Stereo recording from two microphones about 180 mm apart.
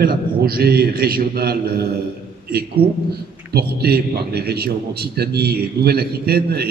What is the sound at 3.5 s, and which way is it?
A man's voice, 60° right (ahead or behind).